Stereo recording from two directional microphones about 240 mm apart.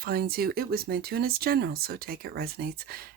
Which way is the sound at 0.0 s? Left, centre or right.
Right.